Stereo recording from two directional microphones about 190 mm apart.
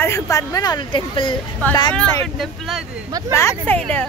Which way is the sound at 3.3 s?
10° left (ahead or behind).